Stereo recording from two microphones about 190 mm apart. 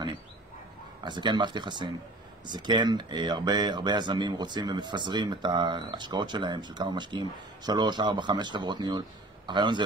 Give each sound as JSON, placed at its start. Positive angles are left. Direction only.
{"t": 1.0, "sound": "speech", "side_deg": -25}